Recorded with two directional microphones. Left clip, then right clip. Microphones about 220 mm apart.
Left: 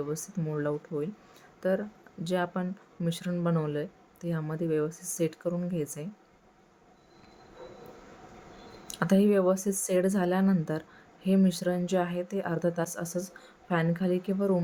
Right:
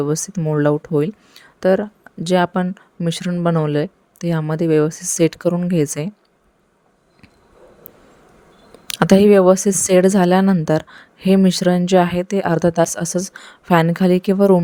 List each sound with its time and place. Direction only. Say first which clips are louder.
0.0 s speech: right 14 dB; 40° right (ahead or behind)
8.9 s speech: right 14 dB; 45° right (ahead or behind)